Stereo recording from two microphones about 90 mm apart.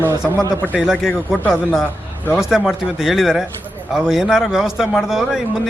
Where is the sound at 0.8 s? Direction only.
5° right (ahead or behind).